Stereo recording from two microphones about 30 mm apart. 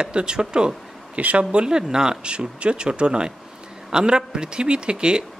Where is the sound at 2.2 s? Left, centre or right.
Right.